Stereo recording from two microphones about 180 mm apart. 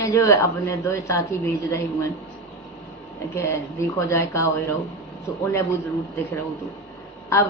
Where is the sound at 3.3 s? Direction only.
15° left (ahead or behind).